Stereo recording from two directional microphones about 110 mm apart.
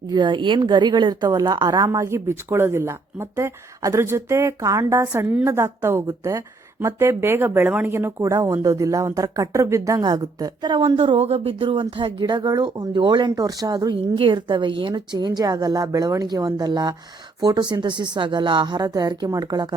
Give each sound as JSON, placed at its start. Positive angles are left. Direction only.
{"t": 0.1, "sound": "a woman's voice", "side_deg": -45}
{"t": 10.8, "sound": "a woman's voice", "side_deg": -55}